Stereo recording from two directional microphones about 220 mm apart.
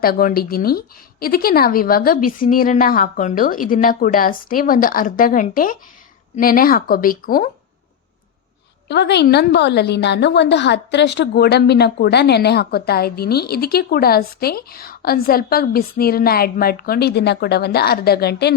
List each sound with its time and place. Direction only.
0.0 s a woman's voice: 40° left (ahead or behind)
8.9 s a woman's voice: 50° left (ahead or behind)